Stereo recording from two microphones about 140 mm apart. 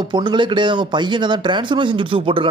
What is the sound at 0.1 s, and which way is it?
A man's voice, 35° right (ahead or behind).